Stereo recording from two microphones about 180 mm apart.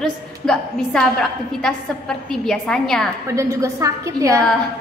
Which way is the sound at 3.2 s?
15° right (ahead or behind).